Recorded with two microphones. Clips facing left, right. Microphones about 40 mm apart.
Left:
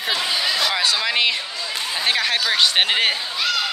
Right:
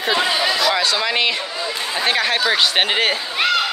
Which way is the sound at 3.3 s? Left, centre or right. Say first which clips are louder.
Right 5 dB; right.